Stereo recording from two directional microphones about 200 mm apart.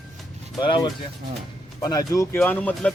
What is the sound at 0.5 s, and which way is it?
Speech, 20° left (ahead or behind).